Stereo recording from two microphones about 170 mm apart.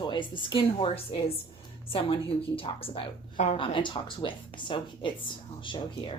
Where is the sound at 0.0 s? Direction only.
30° left (ahead or behind).